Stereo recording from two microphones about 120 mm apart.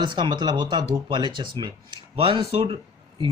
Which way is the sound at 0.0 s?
40° right (ahead or behind).